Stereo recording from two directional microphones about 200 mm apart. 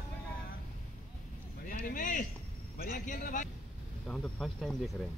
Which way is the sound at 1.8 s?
40° left (ahead or behind).